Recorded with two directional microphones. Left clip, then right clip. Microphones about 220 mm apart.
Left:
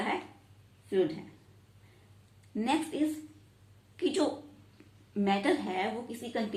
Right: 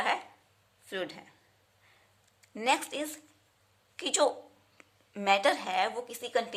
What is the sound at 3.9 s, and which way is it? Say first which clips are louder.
A woman's voice: right 2 dB; 40° right (ahead or behind).